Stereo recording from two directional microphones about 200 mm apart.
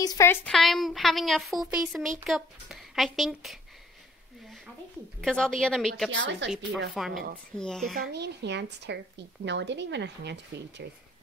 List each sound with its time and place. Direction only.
0.0 s speech: 15° left (ahead or behind)
0.5 s speech: centre (ahead or behind)
5.2 s speech: 5° left (ahead or behind)
6.1 s a woman's voice: 65° right (ahead or behind)
7.0 s speech: centre (ahead or behind)
7.9 s a woman's voice: 50° right (ahead or behind)